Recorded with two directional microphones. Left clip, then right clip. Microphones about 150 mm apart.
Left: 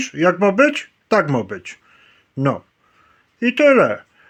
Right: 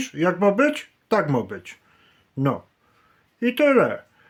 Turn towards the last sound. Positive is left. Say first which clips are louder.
# left 5 dB
turn(degrees=15)  # may be behind; listen again after turning